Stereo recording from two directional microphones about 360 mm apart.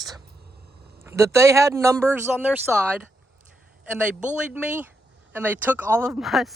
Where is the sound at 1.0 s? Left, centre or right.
Centre.